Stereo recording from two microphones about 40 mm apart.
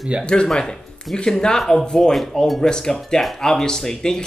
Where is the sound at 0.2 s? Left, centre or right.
Left.